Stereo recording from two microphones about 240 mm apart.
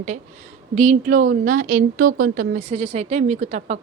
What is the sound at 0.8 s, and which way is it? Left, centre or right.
Speech, right.